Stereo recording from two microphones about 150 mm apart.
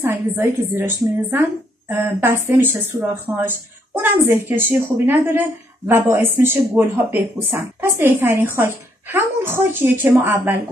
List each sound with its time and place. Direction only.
0.0 s speech: 15° right (ahead or behind)